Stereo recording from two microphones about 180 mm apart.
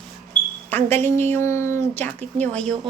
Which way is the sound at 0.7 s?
10° left (ahead or behind).